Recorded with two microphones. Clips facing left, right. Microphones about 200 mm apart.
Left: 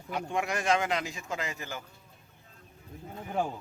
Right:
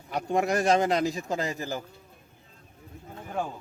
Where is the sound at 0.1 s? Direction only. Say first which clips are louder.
Right 6 dB; 40° right (ahead or behind).